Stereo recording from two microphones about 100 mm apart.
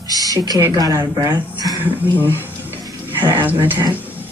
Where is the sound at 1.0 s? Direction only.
45° right (ahead or behind).